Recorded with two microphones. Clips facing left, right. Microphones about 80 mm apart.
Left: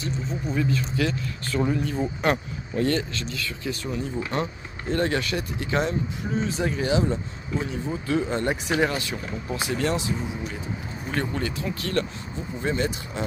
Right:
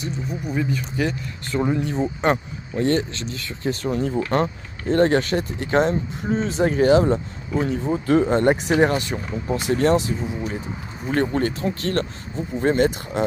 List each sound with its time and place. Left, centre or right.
0.0 s speech: centre; by 13.2 s right